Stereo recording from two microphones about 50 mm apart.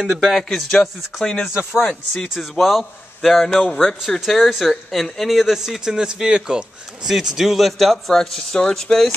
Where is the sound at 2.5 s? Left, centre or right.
Centre.